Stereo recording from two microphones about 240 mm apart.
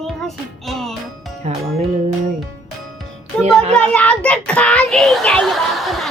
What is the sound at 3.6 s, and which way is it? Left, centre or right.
Speech, right.